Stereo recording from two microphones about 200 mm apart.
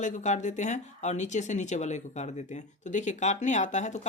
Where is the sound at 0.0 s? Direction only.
35° left (ahead or behind).